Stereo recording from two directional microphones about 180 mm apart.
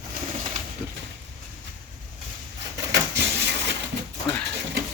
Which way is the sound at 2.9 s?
75° right (ahead or behind).